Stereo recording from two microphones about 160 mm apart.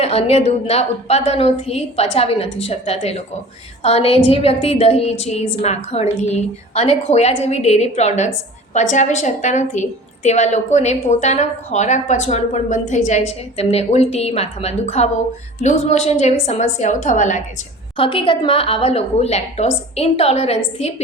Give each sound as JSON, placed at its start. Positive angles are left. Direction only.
{"t": 0.0, "sound": "a woman's voice", "side_deg": 40}
{"t": 17.9, "sound": "a woman's voice", "side_deg": 35}